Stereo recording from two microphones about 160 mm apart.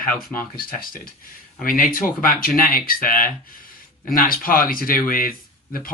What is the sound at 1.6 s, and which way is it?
Speech, 60° left (ahead or behind).